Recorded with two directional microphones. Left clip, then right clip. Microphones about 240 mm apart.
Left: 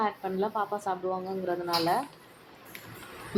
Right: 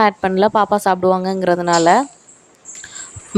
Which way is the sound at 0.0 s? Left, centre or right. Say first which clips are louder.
Right 15 dB; right.